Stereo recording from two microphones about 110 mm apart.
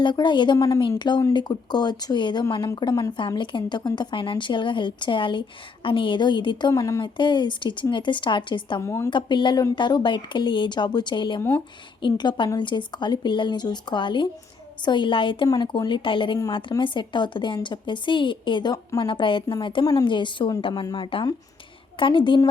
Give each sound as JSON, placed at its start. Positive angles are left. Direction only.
{"t": 0.0, "sound": "a woman's voice", "side_deg": 45}
{"t": 3.2, "sound": "a woman's voice", "side_deg": 50}
{"t": 7.0, "sound": "a woman's voice", "side_deg": 45}
{"t": 8.8, "sound": "a woman's voice", "side_deg": 25}
{"t": 9.0, "sound": "a woman's voice", "side_deg": 45}
{"t": 15.4, "sound": "a woman's voice", "side_deg": 40}
{"t": 19.8, "sound": "speech", "side_deg": 35}
{"t": 20.1, "sound": "a woman's voice", "side_deg": 45}